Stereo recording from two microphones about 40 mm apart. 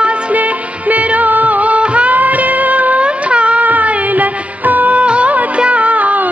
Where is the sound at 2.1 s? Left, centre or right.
Right.